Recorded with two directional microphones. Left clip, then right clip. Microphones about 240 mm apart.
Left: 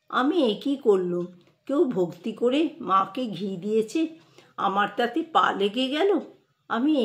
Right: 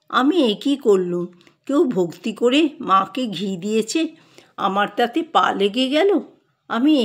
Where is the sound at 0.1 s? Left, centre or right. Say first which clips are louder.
Right 5 dB; right.